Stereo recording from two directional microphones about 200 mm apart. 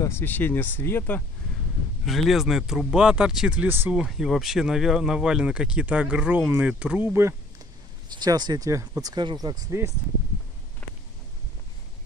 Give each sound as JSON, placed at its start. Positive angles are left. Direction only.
{"t": 0.0, "sound": "speech", "side_deg": 10}
{"t": 2.0, "sound": "speech", "side_deg": 0}